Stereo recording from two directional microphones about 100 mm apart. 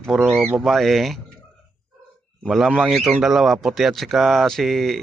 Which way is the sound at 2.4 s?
Centre (ahead or behind).